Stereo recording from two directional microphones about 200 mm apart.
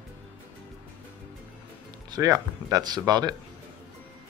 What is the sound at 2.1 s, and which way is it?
Speech, 15° right (ahead or behind).